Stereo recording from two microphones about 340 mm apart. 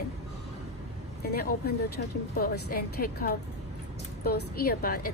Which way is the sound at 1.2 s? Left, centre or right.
Left.